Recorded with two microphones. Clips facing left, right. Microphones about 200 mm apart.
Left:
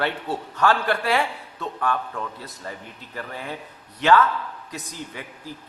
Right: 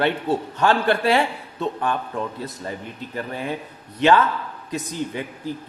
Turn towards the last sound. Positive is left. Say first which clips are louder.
# right 9 dB
turn(degrees=-25)  # may be behind; listen again after turning